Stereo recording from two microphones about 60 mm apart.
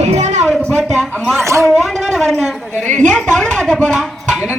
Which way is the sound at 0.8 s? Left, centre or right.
Centre.